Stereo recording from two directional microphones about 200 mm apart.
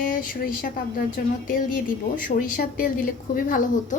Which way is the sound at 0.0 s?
45° left (ahead or behind).